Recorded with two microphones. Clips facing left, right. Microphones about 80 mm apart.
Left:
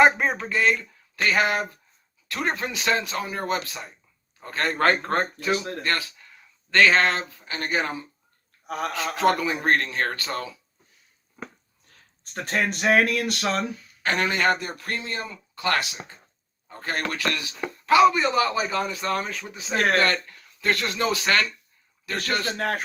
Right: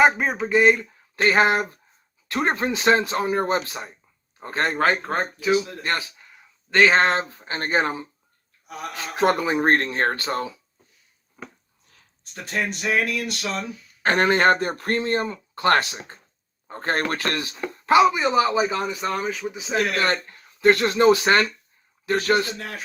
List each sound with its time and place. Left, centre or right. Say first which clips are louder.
0.0 s speech: even; centre
0.3 s a man's voice: right 5 dB; right
4.8 s speech: left 2 dB; centre
5.5 s speech: right 5 dB; left
5.8 s speech: right 1 dB; right
8.6 s speech: left 5 dB; left
8.9 s speech: right 1 dB; right
12.2 s speech: left 1 dB; left
14.0 s speech: right 5 dB; right
17.7 s speech: even; right; by 19.7 s centre
19.7 s speech: left 1 dB; left
20.0 s speech: even; right
22.5 s speech: left 8 dB; left